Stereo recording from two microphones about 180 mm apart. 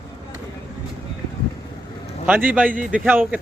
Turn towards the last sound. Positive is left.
turn(degrees=-10)  # may be behind; listen again after turning